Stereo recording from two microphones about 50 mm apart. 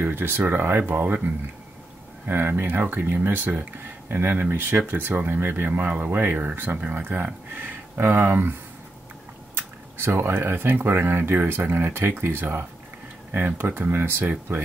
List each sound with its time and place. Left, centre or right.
0.0 s speech: right
0.4 s speech: right
4.9 s speech: right
7.6 s speech: right
9.9 s speech: right
13.3 s speech: right